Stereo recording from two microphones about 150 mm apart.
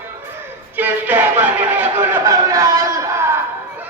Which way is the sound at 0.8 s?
10° right (ahead or behind).